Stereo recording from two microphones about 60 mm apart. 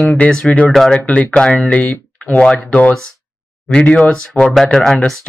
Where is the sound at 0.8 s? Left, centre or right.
Centre.